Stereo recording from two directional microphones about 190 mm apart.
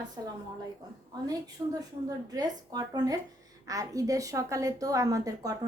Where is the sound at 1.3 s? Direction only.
20° right (ahead or behind).